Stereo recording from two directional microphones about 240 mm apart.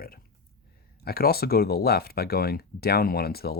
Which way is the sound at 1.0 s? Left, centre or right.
Left.